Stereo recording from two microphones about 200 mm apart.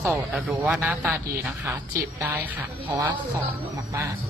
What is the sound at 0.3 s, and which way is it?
A woman's voice, 5° right (ahead or behind).